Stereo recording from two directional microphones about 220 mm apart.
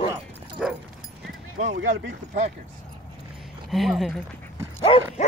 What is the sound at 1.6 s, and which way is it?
Speech, 60° right (ahead or behind).